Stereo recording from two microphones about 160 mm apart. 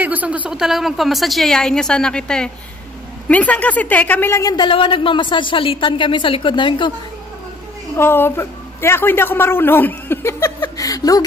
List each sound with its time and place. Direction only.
0.0 s a woman's voice: 10° right (ahead or behind); by 6.9 s 30° left (ahead or behind)
7.9 s a woman's voice: 15° left (ahead or behind)